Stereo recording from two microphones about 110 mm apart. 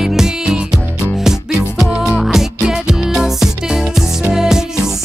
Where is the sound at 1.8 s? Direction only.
5° right (ahead or behind).